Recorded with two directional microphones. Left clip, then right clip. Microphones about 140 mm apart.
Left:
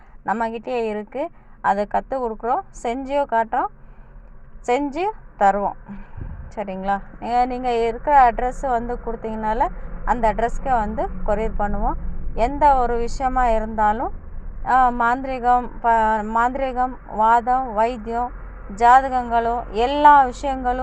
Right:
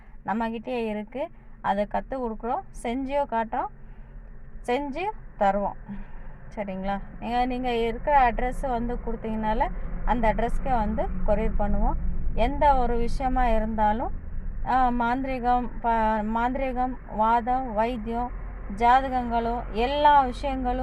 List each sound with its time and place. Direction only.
0.3 s a woman's voice: 20° left (ahead or behind)